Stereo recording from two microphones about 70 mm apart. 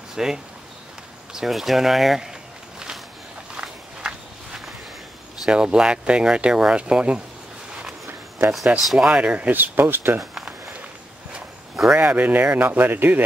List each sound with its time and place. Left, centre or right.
0.1 s speech: centre
3.6 s walk: centre
5.4 s speech: centre
8.7 s speech: centre
9.0 s speech: centre
11.3 s a sound: centre
12.0 s speech: right